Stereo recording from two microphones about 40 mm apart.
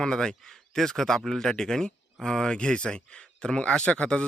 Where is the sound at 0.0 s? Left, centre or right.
Centre.